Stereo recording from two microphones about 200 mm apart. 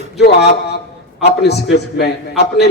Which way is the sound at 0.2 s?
55° left (ahead or behind).